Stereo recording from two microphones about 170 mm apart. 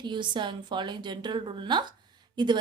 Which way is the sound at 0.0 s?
25° right (ahead or behind).